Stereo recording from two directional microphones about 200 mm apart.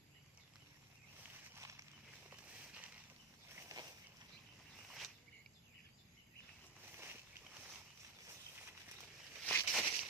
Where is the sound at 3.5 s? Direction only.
15° right (ahead or behind).